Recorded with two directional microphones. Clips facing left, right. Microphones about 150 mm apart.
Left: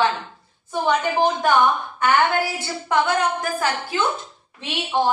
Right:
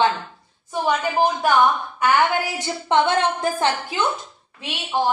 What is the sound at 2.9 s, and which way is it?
A woman's voice, 25° right (ahead or behind).